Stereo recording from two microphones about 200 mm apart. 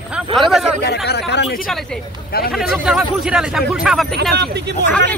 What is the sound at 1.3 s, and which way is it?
Speech, 60° left (ahead or behind).